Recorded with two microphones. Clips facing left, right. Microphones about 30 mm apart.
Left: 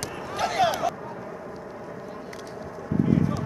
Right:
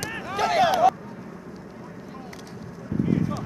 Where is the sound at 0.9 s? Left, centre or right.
Centre.